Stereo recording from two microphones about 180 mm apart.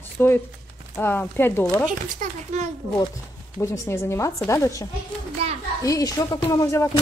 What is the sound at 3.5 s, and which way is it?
Speech, 15° left (ahead or behind).